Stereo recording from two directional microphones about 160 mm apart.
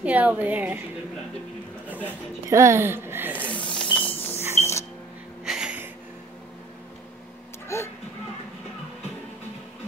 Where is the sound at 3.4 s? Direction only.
10° left (ahead or behind).